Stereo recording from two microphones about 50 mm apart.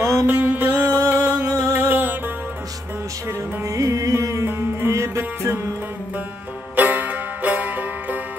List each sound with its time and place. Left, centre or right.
0.0 s music: right
0.3 s music: right
1.6 s music: right
3.3 s music: right
4.5 s music: right
4.9 s music: right
6.7 s music: right